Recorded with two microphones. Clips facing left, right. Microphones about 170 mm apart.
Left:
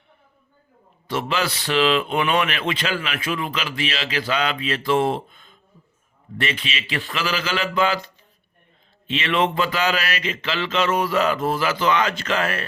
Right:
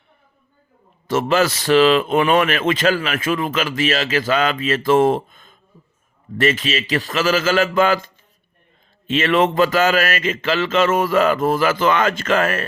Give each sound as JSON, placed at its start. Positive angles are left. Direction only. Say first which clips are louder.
{"t": 1.0, "sound": "speech", "louder": "right 7 dB", "side_deg": -45}